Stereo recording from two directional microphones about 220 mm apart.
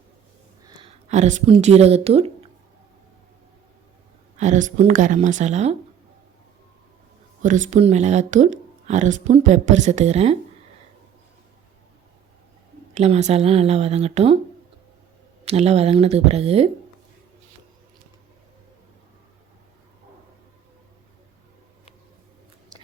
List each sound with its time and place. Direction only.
0.6 s a sound: 20° right (ahead or behind)
1.0 s speech: 30° right (ahead or behind)
4.4 s speech: 35° right (ahead or behind)
7.4 s speech: 35° right (ahead or behind)
12.9 s speech: 30° right (ahead or behind)
15.4 s speech: 30° right (ahead or behind)